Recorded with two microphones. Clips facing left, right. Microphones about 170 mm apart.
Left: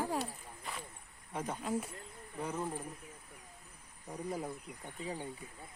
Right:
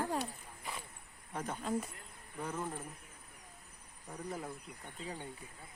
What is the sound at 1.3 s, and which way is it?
Speech, 10° left (ahead or behind).